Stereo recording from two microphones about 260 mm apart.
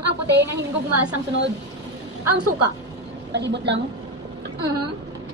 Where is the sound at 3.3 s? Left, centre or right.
Right.